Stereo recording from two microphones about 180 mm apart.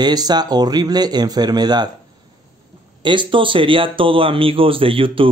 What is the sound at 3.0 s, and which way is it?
Speech, 25° right (ahead or behind).